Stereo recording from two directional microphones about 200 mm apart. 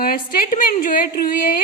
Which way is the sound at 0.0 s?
45° left (ahead or behind).